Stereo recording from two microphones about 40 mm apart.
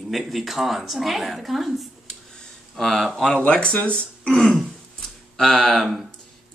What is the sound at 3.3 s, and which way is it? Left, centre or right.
Speech, left.